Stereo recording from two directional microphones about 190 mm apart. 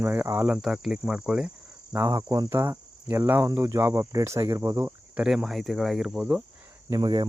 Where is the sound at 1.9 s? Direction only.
15° right (ahead or behind).